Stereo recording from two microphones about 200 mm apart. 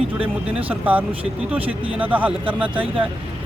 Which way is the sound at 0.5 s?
10° right (ahead or behind).